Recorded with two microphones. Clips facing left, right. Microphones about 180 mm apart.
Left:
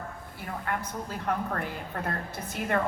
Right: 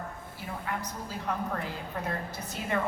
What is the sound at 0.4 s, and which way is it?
A woman's voice, 55° left (ahead or behind).